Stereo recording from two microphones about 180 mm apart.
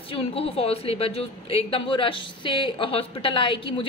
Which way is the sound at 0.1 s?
30° left (ahead or behind).